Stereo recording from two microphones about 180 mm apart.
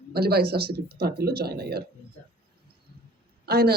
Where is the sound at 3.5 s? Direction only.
60° right (ahead or behind).